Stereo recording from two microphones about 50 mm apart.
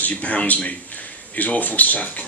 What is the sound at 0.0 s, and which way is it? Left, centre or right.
A man's voice, left.